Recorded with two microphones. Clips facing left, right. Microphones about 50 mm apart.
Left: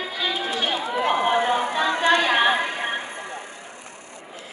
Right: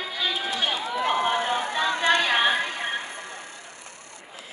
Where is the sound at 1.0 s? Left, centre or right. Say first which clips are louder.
Left 3 dB; centre.